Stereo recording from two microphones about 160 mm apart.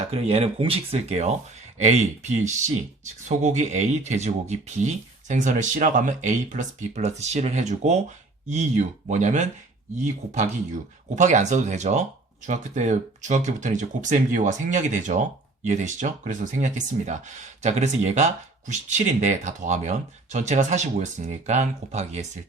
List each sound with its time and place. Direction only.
0.0 s speech: 40° right (ahead or behind)